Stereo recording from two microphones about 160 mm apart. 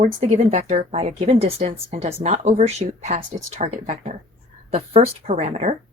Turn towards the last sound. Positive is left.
turn(degrees=-45)  # may be behind; listen again after turning